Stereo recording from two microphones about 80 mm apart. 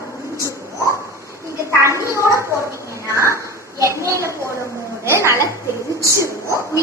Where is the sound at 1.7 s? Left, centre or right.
Right.